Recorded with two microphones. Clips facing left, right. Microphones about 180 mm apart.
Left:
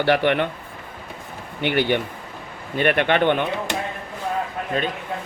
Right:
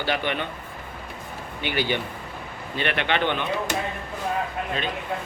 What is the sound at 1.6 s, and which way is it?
Speech, 60° left (ahead or behind).